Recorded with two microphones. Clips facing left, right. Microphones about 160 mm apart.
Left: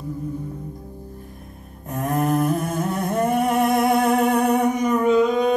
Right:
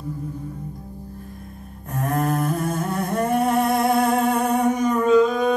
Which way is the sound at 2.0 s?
20° left (ahead or behind).